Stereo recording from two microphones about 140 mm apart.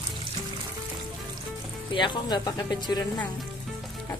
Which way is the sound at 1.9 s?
35° left (ahead or behind).